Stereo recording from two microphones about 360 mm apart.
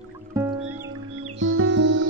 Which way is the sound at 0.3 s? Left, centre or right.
Centre.